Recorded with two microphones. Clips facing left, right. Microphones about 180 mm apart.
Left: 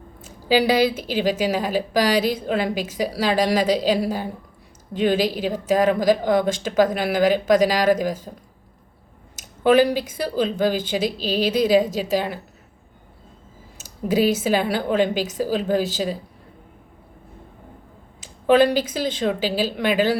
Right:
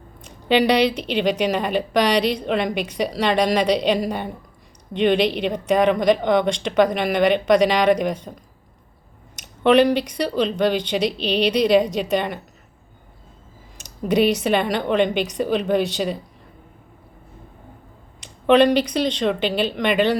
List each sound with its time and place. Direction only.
0.2 s speech: 5° left (ahead or behind)
9.3 s a sound: 5° left (ahead or behind)
10.0 s speech: 5° left (ahead or behind)
13.7 s speech: centre (ahead or behind)
18.2 s a sound: 5° left (ahead or behind)
18.8 s speech: 5° left (ahead or behind)